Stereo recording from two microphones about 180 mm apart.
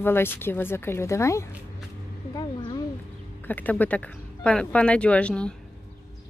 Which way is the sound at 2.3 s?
25° left (ahead or behind).